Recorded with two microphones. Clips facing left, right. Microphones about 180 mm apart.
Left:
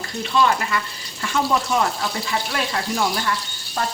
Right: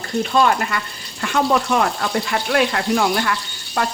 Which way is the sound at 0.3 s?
50° right (ahead or behind).